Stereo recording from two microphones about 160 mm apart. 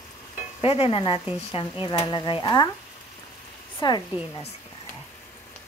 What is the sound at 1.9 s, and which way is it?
Speech, 30° left (ahead or behind).